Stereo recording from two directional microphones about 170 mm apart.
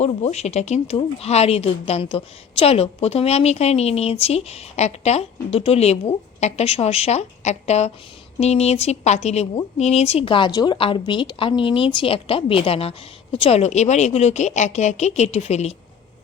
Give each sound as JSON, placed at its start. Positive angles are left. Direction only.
{"t": 0.0, "sound": "speech", "side_deg": 40}